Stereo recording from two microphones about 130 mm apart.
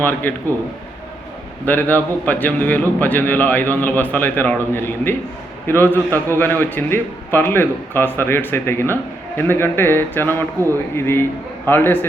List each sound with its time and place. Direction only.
0.0 s a man's voice: 15° left (ahead or behind)
1.6 s a man's voice: 15° left (ahead or behind)